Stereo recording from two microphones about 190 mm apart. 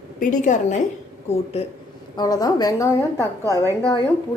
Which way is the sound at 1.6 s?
30° left (ahead or behind).